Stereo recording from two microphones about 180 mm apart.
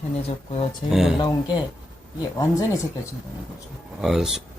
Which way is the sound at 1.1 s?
25° left (ahead or behind).